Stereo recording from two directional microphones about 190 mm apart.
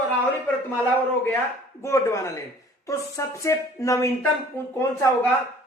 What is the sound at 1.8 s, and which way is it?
Speech, 15° left (ahead or behind).